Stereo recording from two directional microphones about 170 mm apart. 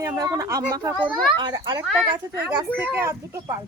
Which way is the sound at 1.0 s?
5° left (ahead or behind).